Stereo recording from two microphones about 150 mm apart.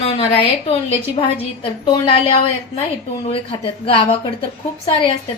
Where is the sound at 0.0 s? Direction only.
40° left (ahead or behind).